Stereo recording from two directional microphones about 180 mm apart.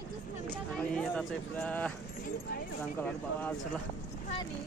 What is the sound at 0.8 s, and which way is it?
Speech, 5° left (ahead or behind).